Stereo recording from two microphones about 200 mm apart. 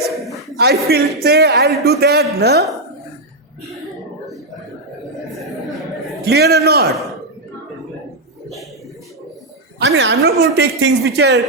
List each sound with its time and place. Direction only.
0.6 s a man's voice: 55° right (ahead or behind)
6.2 s a man's voice: 55° right (ahead or behind)
9.7 s a man's voice: 60° right (ahead or behind)